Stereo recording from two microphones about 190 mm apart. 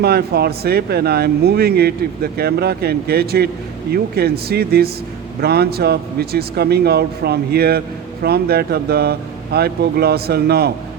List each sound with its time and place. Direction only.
0.0 s speech: 55° right (ahead or behind)